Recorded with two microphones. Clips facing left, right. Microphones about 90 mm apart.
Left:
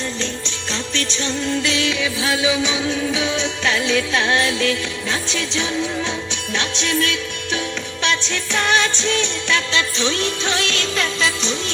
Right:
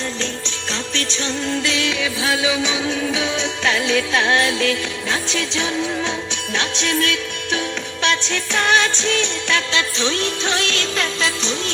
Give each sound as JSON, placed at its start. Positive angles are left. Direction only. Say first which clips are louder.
{"t": 0.2, "sound": "music", "louder": "even", "side_deg": -45}
{"t": 1.1, "sound": "music", "louder": "left 1 dB", "side_deg": -5}
{"t": 3.2, "sound": "music", "louder": "even", "side_deg": -50}
{"t": 10.5, "sound": "music", "louder": "even", "side_deg": -35}